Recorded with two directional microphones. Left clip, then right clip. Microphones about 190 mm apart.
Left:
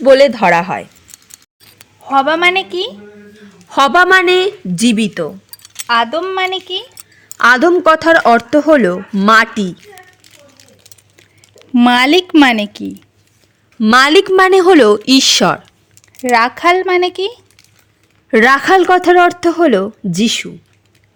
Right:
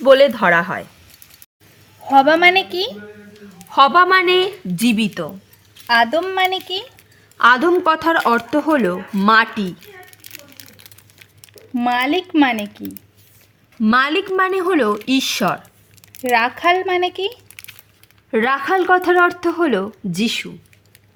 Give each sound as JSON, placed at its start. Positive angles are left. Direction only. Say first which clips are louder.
{"t": 0.0, "sound": "speech", "louder": "left 4 dB", "side_deg": 15}
{"t": 2.0, "sound": "speech", "louder": "even", "side_deg": 10}
{"t": 3.7, "sound": "speech", "louder": "left 3 dB", "side_deg": 30}
{"t": 5.9, "sound": "a woman's voice", "louder": "left 2 dB", "side_deg": 5}
{"t": 7.3, "sound": "speech", "louder": "left 4 dB", "side_deg": 30}
{"t": 11.7, "sound": "a woman's voice", "louder": "left 8 dB", "side_deg": 50}